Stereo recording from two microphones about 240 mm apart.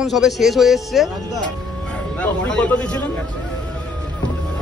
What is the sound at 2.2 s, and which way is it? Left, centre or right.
Speech, centre.